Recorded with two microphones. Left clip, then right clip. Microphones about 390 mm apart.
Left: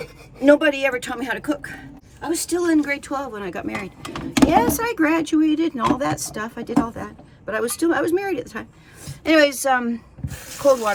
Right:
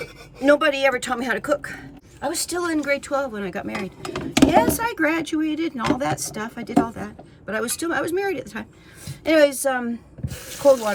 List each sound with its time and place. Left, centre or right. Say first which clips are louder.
0.4 s a woman's voice: left 1 dB; centre